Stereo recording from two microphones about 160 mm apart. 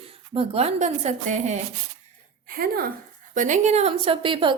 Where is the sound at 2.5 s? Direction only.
70° right (ahead or behind).